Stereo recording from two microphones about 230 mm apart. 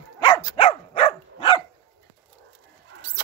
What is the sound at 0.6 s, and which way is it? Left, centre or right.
Dog, left.